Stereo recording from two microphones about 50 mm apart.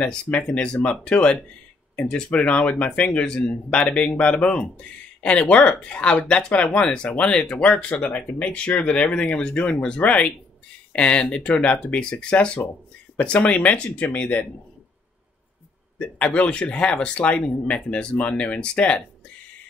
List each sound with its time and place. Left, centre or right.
0.4 s speech: centre
16.0 s speech: left